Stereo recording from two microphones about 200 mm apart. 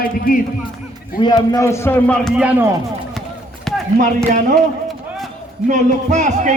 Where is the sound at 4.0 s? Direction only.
40° right (ahead or behind).